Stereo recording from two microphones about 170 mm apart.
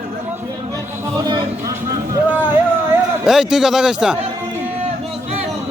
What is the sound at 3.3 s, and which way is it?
Speech, 5° right (ahead or behind).